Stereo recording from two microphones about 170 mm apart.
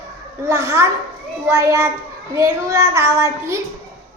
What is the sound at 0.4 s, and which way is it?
A child's voice, 15° right (ahead or behind).